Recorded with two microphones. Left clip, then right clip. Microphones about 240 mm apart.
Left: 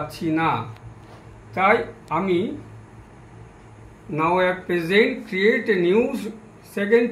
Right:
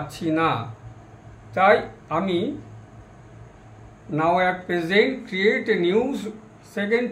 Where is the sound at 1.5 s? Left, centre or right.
Right.